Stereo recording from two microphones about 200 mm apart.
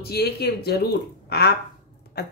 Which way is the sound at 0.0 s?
50° left (ahead or behind).